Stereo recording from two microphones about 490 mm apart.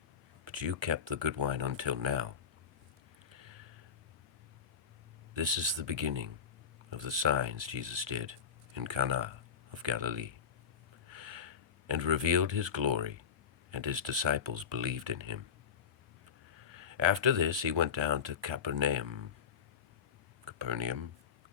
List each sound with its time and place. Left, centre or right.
0.4 s speech: right
3.3 s a sound: right
5.3 s speech: right
16.6 s speech: right
20.4 s speech: right